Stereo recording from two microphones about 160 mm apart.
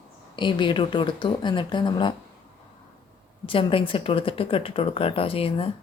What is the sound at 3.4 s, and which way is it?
Speech, 35° left (ahead or behind).